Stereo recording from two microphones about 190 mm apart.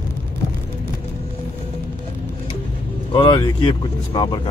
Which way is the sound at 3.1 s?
25° left (ahead or behind).